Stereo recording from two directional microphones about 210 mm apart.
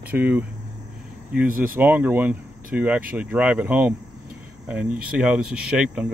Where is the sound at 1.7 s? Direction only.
10° right (ahead or behind).